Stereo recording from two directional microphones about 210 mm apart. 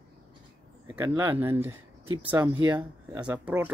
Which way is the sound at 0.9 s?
15° right (ahead or behind).